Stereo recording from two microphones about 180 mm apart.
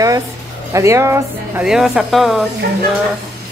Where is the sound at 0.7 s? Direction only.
15° right (ahead or behind).